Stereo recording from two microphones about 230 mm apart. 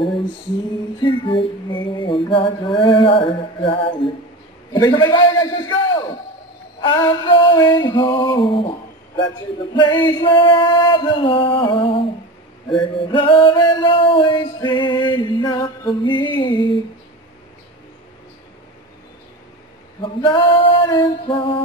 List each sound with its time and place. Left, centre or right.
1.0 s a sound: left
4.7 s a man's voice: centre
6.8 s male singing: centre
20.0 s male singing: left